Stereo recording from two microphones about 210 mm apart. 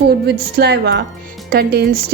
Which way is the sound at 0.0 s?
50° right (ahead or behind).